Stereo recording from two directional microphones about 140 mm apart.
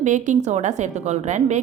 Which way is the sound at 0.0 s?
60° right (ahead or behind).